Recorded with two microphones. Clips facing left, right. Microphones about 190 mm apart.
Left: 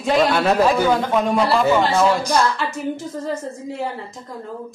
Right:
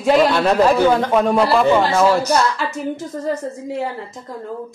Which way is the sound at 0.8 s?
5° right (ahead or behind).